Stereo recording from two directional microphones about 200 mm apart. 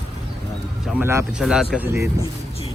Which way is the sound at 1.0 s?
10° right (ahead or behind).